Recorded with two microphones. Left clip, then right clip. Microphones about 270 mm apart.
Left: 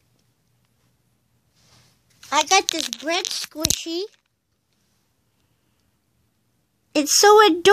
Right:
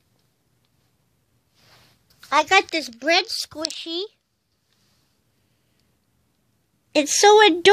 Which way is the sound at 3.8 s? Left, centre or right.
Centre.